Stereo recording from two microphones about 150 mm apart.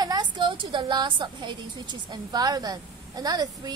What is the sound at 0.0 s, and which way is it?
A woman's voice, 30° right (ahead or behind).